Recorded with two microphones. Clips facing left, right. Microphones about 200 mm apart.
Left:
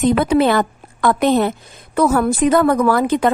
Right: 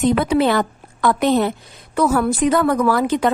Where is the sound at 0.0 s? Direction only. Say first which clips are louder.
Left 2 dB; 50° left (ahead or behind).